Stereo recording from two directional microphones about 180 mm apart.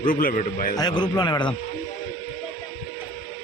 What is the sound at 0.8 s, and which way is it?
Speech, 25° left (ahead or behind).